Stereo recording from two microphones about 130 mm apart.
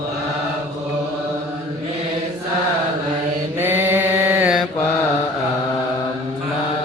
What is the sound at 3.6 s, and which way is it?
Mantra, 15° right (ahead or behind).